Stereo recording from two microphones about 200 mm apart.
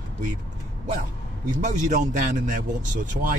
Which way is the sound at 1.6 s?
40° right (ahead or behind).